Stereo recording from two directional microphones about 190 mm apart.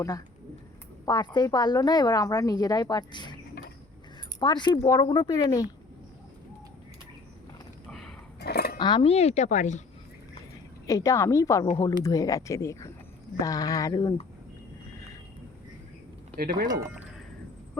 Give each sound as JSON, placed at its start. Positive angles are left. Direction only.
{"t": 1.0, "sound": "a woman's voice", "side_deg": 20}
{"t": 4.4, "sound": "a woman's voice", "side_deg": 25}
{"t": 7.9, "sound": "a sound", "side_deg": 0}
{"t": 8.4, "sound": "cutlery", "side_deg": 60}
{"t": 8.8, "sound": "speech", "side_deg": 25}
{"t": 10.8, "sound": "a woman's voice", "side_deg": 15}
{"t": 16.4, "sound": "speech", "side_deg": -50}
{"t": 16.6, "sound": "speech", "side_deg": -20}